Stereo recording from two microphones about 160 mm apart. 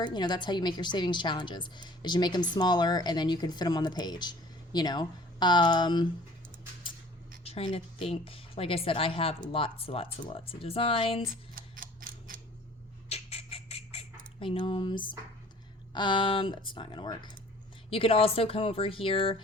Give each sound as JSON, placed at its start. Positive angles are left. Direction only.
{"t": 0.0, "sound": "a woman's voice", "side_deg": 25}
{"t": 7.4, "sound": "speech", "side_deg": 40}
{"t": 11.3, "sound": "music", "side_deg": -60}
{"t": 13.1, "sound": "squawk", "side_deg": 40}
{"t": 16.0, "sound": "a woman's voice", "side_deg": 30}